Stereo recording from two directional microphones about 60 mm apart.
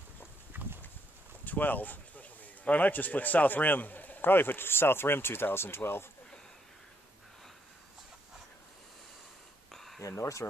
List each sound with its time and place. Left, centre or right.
0.5 s clip-clop: right
1.4 s speech: left
9.7 s a sound: centre
10.0 s speech: left